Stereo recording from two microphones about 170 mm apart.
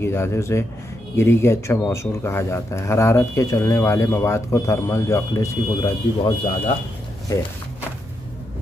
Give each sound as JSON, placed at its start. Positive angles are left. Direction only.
{"t": 0.0, "sound": "speech", "side_deg": 15}